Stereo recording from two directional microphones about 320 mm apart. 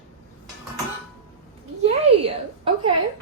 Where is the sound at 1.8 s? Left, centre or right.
Centre.